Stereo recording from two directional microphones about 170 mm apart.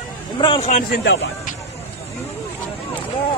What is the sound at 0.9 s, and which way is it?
Speech, 90° left.